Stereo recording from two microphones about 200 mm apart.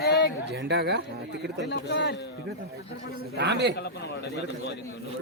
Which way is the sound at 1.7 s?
60° left (ahead or behind).